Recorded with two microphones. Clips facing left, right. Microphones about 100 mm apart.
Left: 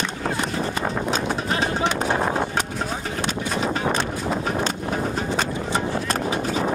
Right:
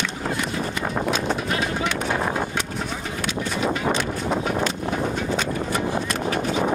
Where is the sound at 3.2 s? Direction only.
35° left (ahead or behind).